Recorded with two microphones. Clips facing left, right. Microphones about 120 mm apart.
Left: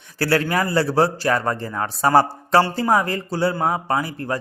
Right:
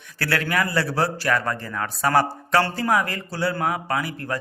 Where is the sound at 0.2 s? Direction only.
30° left (ahead or behind).